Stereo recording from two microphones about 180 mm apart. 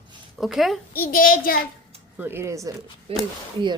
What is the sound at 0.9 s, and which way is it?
Speech, 55° left (ahead or behind).